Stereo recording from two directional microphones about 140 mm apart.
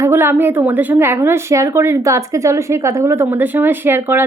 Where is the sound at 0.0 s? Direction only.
15° right (ahead or behind).